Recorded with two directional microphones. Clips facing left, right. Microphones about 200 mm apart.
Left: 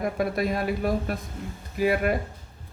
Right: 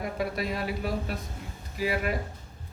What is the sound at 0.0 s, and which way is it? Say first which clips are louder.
Speech: left 5 dB; 50° left (ahead or behind).